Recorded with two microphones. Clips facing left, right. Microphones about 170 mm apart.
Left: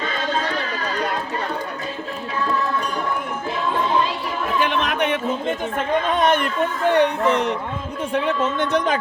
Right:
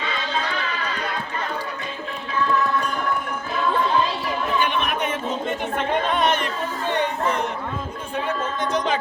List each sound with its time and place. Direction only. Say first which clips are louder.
0.0 s run: left 3 dB; 45° left (ahead or behind)
4.8 s a sound: left 3 dB; 80° left
5.7 s a woman's voice: left 1 dB; 45° left (ahead or behind)
6.9 s speech: left 5 dB; 75° left (ahead or behind); by 9.0 s 55° left (ahead or behind)